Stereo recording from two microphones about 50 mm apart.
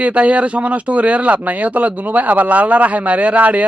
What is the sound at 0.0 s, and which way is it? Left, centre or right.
Speech, right.